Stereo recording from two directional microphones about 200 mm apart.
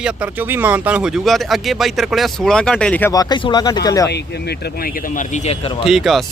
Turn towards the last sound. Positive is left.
turn(degrees=0)  # may be behind; listen again after turning